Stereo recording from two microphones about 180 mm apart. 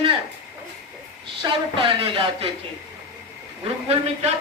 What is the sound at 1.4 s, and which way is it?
Speech, 30° right (ahead or behind).